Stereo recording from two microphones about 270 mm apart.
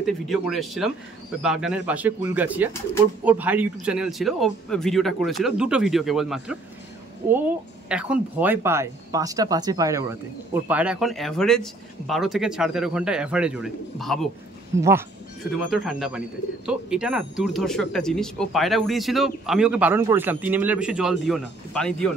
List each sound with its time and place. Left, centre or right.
0.0 s speech: centre
14.8 s speech: centre